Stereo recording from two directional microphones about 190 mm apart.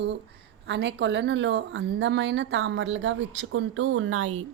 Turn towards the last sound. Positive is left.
turn(degrees=-90)